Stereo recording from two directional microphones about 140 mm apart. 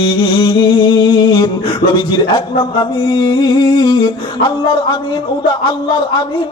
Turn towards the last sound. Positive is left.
turn(degrees=35)  # may be behind; listen again after turning